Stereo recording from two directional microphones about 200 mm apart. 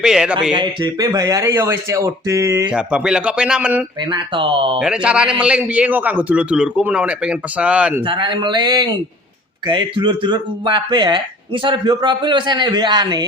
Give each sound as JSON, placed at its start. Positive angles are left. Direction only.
{"t": 0.0, "sound": "a man's voice", "side_deg": -5}
{"t": 0.5, "sound": "speech", "side_deg": -20}
{"t": 2.7, "sound": "a man's voice", "side_deg": -5}
{"t": 4.1, "sound": "speech", "side_deg": -25}
{"t": 4.8, "sound": "a man's voice", "side_deg": -5}
{"t": 8.0, "sound": "speech", "side_deg": -25}